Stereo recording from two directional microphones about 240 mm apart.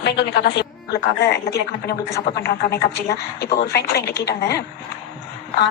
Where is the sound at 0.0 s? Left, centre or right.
Left.